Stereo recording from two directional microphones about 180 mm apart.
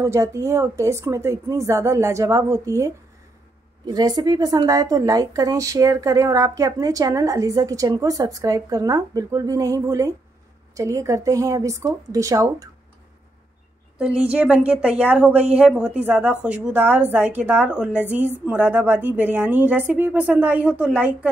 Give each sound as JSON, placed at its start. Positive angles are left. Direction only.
{"t": 0.0, "sound": "a woman's voice", "side_deg": -15}
{"t": 13.9, "sound": "a woman's voice", "side_deg": -5}